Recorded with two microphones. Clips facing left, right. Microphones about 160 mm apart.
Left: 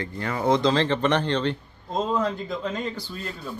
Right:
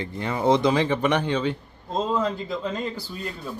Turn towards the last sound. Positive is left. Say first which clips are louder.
# right 1 dB
turn(degrees=-5)  # may be behind; listen again after turning